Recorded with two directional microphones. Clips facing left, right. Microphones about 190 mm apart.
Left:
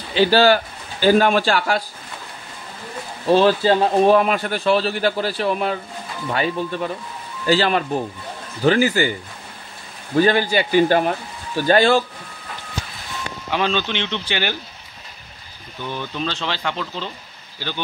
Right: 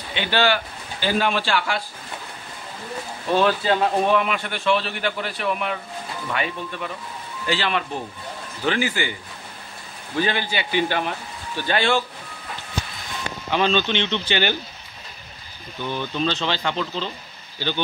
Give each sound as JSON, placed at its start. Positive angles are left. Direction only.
{"t": 0.1, "sound": "a man's voice", "side_deg": 35}
{"t": 3.3, "sound": "a man's voice", "side_deg": 30}
{"t": 10.1, "sound": "a man's voice", "side_deg": 40}
{"t": 13.5, "sound": "speech", "side_deg": 5}
{"t": 16.2, "sound": "speech", "side_deg": 5}